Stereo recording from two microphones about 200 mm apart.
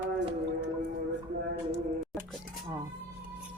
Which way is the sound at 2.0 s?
Centre (ahead or behind).